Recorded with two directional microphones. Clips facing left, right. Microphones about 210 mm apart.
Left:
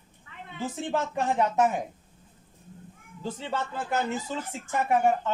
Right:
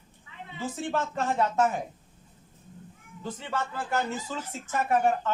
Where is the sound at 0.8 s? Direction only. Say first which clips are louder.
Left 1 dB; 15° left (ahead or behind).